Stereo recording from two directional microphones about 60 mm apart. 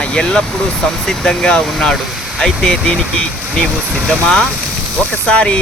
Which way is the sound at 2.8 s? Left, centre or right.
Centre.